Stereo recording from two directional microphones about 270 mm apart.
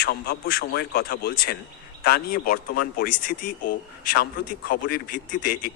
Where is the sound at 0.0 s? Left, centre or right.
Left.